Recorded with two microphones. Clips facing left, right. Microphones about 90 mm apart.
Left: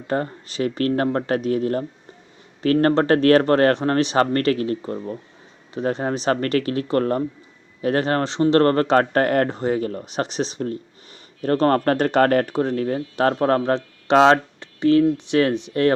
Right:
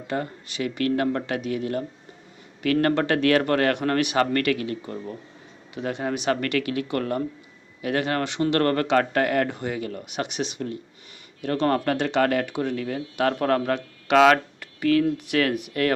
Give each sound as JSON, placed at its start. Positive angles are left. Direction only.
{"t": 0.1, "sound": "speech", "side_deg": 40}
{"t": 2.8, "sound": "speech", "side_deg": 35}